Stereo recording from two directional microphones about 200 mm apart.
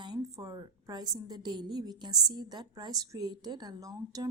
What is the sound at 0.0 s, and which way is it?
A woman's voice, 20° right (ahead or behind).